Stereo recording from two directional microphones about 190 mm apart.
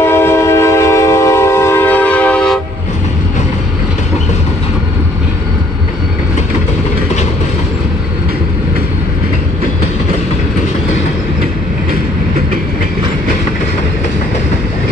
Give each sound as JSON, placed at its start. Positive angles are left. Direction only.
{"t": 0.0, "sound": "train", "side_deg": 15}